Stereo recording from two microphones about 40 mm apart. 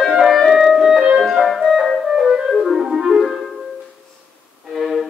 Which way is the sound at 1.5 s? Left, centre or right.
Centre.